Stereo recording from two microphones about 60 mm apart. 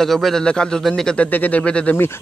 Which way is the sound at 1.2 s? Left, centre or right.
Left.